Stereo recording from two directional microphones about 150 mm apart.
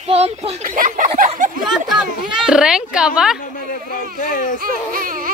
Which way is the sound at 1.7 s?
5° right (ahead or behind).